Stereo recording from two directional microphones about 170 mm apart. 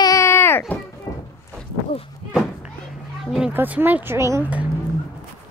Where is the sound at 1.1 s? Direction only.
20° left (ahead or behind).